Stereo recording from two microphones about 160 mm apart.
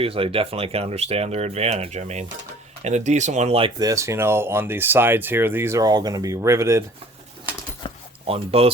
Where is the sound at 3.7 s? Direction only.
20° right (ahead or behind).